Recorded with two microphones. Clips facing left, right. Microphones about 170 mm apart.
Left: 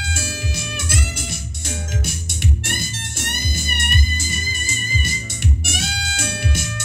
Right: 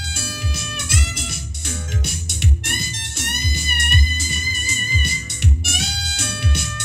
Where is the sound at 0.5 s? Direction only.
Centre (ahead or behind).